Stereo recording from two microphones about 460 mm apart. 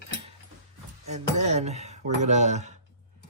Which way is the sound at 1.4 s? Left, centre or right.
Centre.